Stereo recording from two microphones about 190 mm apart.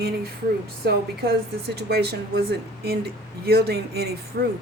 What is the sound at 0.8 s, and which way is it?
Speech, 55° right (ahead or behind).